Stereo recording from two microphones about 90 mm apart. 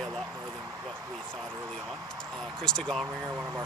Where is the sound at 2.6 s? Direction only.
10° left (ahead or behind).